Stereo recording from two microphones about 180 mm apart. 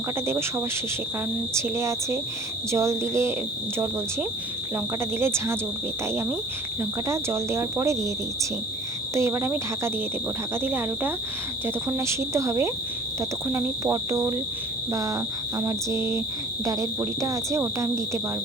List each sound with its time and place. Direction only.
0.3 s speech: 15° right (ahead or behind)
5.2 s speech: 15° right (ahead or behind)
7.1 s speech: 15° right (ahead or behind)
9.1 s speech: 15° right (ahead or behind)
15.5 s speech: 15° right (ahead or behind)